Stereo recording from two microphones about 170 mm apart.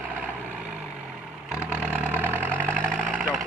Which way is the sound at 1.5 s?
5° right (ahead or behind).